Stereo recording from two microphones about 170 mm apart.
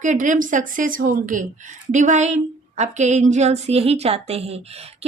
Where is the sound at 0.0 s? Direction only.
45° right (ahead or behind).